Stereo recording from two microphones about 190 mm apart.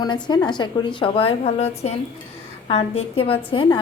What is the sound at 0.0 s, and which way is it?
A woman's voice, 20° left (ahead or behind).